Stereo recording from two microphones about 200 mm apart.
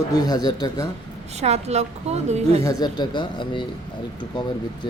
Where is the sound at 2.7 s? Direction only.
20° left (ahead or behind).